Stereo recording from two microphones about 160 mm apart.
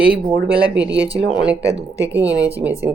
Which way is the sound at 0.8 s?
90° right.